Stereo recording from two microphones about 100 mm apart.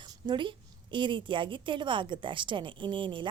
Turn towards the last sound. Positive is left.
turn(degrees=-55)  # may be behind; listen again after turning